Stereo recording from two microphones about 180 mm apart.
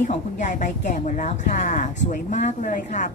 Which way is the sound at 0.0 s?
45° left (ahead or behind).